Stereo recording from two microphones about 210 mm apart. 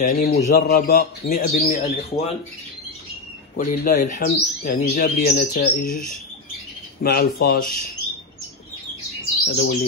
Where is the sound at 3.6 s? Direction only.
40° left (ahead or behind).